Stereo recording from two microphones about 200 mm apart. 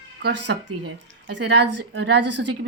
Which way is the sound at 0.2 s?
60° right (ahead or behind).